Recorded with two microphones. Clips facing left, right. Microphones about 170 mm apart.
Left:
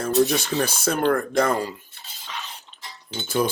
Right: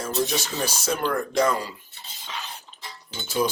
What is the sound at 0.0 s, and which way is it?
Speech, 55° left (ahead or behind).